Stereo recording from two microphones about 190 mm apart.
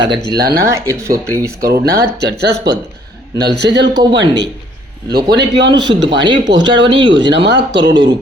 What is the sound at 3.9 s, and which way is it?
Speech, 20° right (ahead or behind).